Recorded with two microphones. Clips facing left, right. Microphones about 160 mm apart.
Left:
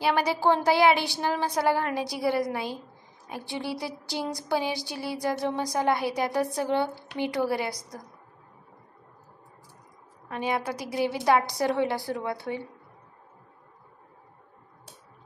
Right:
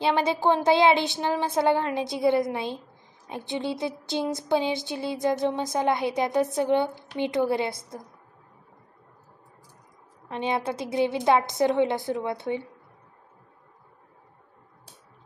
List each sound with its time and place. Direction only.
0.0 s speech: 20° right (ahead or behind)
10.2 s speech: 25° right (ahead or behind)